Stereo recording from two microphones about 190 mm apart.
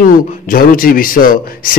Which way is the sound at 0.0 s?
45° left (ahead or behind).